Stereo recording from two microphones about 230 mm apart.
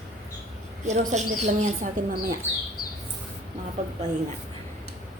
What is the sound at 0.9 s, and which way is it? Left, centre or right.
Speech, right.